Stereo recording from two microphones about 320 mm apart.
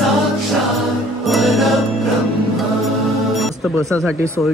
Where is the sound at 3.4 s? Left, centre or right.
Centre.